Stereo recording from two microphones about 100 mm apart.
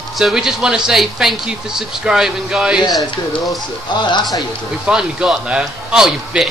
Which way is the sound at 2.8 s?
45° left (ahead or behind).